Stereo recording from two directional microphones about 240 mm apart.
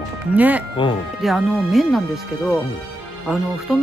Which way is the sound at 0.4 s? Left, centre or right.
Centre.